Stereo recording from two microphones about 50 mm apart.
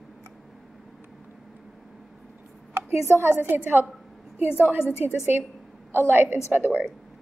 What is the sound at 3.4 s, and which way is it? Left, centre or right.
Speech, right.